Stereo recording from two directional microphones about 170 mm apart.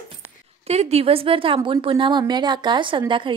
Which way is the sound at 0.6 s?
40° right (ahead or behind).